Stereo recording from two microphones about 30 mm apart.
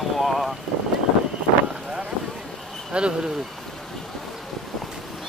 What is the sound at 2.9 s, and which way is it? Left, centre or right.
Speech, right.